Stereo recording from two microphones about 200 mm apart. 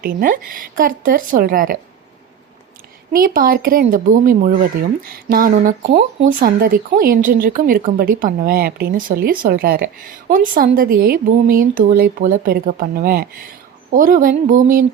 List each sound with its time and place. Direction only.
0.0 s a woman's voice: 45° right (ahead or behind)
3.1 s a woman's voice: 45° right (ahead or behind)